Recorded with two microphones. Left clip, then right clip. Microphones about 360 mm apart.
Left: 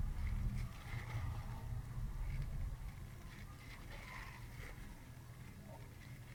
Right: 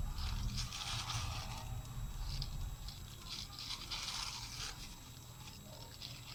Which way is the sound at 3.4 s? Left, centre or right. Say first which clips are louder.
Right 13 dB; right.